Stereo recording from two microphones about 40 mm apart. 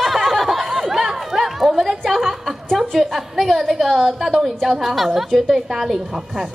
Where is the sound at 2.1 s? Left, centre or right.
Centre.